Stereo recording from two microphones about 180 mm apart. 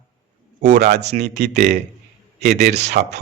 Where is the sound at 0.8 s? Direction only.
70° right (ahead or behind).